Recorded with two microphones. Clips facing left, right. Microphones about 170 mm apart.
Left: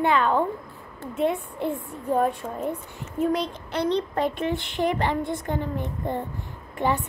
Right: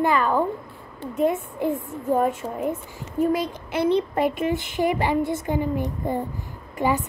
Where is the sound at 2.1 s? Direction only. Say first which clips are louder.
Right 2 dB; 10° right (ahead or behind).